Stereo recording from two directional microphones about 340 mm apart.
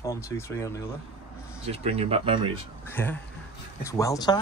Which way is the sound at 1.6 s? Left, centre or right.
Centre.